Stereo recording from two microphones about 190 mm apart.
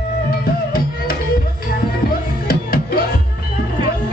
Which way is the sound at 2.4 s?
50° left (ahead or behind).